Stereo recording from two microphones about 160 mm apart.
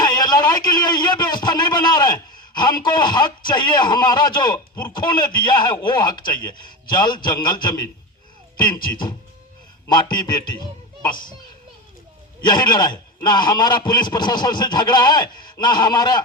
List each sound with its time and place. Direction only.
0.0 s a man's voice: 25° left (ahead or behind)
9.9 s a man's voice: 25° left (ahead or behind)
12.4 s a man's voice: 25° left (ahead or behind)